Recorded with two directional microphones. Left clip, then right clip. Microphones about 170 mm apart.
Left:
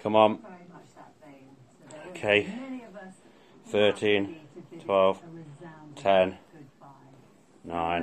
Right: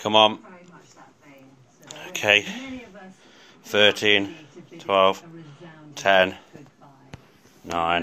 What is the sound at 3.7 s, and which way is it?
Speech, 5° left (ahead or behind).